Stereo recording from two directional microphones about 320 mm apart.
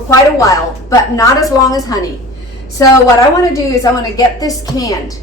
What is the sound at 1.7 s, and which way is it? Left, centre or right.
Speech, centre.